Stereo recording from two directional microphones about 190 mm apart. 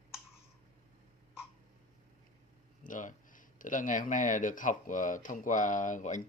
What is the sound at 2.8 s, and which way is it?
Speech, 45° left (ahead or behind).